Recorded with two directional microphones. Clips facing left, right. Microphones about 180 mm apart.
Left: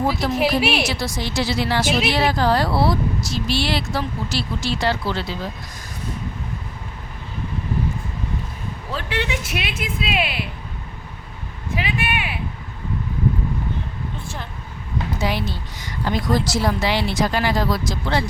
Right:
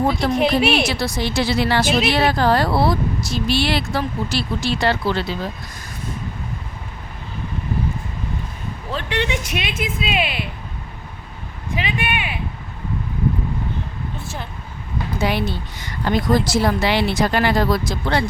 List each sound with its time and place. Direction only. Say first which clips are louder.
0.3 s speech: right 3 dB; 5° left (ahead or behind)
0.9 s speech: right 3 dB; 65° right (ahead or behind)
8.9 s speech: right 3 dB; 5° left (ahead or behind)
11.7 s speech: right 1 dB; 5° left (ahead or behind)
15.2 s speech: right 5 dB; 60° right (ahead or behind)